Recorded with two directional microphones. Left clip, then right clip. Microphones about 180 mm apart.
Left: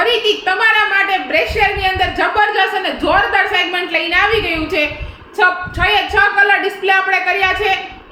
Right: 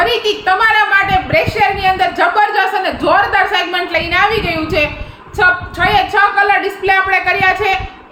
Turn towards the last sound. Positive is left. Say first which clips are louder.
# right 2 dB
turn(degrees=-5)  # may be behind; listen again after turning